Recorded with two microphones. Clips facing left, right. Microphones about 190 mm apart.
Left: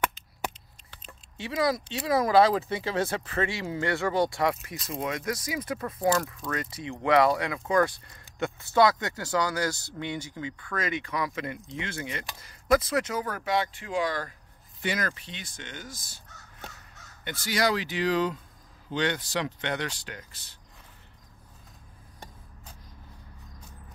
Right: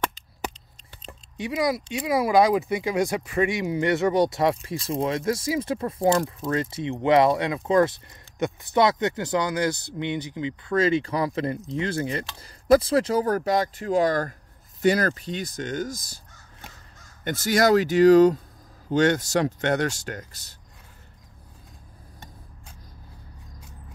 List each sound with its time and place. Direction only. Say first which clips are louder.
1.3 s speech: right 2 dB; 15° right (ahead or behind); by 16.2 s 40° right (ahead or behind)
17.2 s speech: right 7 dB; 45° right (ahead or behind)